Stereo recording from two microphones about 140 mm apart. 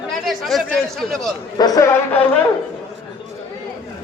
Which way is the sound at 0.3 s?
Centre (ahead or behind).